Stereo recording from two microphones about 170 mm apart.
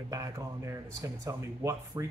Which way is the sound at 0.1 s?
20° right (ahead or behind).